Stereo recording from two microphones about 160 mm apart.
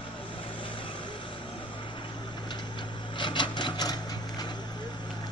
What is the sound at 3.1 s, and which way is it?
Wood, 30° left (ahead or behind).